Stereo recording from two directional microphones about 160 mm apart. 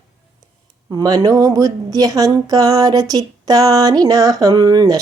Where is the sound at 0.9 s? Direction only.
25° right (ahead or behind).